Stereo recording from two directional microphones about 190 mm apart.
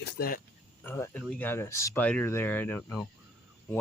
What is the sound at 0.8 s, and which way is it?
Speech, 10° left (ahead or behind).